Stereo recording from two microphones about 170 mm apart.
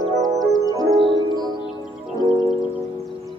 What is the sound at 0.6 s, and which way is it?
Music, 25° right (ahead or behind).